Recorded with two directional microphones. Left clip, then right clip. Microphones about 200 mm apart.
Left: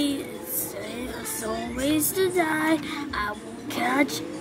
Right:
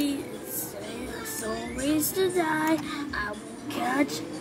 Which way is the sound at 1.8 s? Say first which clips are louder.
Left 2 dB; 15° left (ahead or behind).